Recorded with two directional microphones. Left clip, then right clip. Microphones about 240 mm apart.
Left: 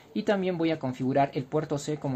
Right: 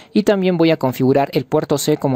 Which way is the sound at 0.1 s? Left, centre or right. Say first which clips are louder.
Right 11 dB; right.